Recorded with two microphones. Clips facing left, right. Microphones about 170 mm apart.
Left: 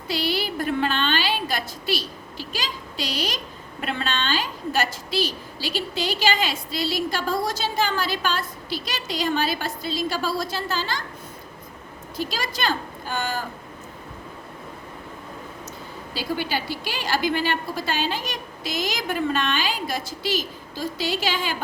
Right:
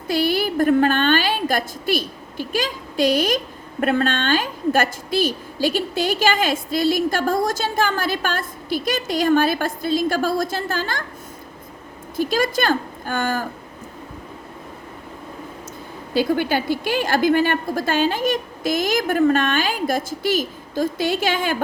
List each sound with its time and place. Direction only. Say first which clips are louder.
0.1 s a woman's voice: right 6 dB; 50° right (ahead or behind)
12.1 s a woman's voice: right 9 dB; 50° right (ahead or behind)
16.1 s a woman's voice: right 8 dB; 50° right (ahead or behind)